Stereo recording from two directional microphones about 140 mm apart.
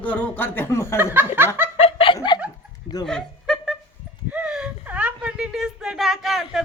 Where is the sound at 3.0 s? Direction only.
5° left (ahead or behind).